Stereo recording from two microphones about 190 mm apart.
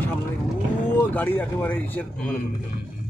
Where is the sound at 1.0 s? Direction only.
10° left (ahead or behind).